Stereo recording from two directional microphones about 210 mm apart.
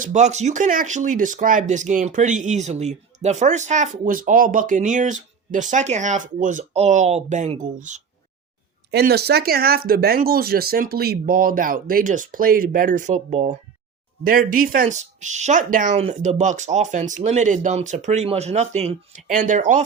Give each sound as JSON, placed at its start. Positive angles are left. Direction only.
{"t": 0.0, "sound": "speech", "side_deg": -35}
{"t": 8.9, "sound": "speech", "side_deg": -50}